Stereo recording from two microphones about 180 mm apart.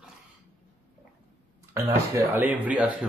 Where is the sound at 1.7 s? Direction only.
15° right (ahead or behind).